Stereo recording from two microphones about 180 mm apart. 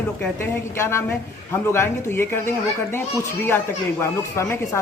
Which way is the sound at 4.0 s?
15° left (ahead or behind).